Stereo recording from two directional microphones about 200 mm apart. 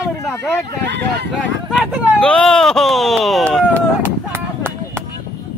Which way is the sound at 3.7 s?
10° right (ahead or behind).